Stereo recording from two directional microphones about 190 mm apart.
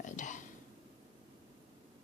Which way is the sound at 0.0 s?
40° left (ahead or behind).